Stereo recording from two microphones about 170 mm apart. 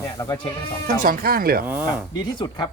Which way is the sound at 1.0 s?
60° right (ahead or behind).